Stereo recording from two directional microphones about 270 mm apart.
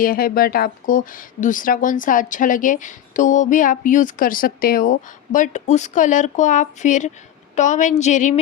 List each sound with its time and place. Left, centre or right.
0.0 s speech: left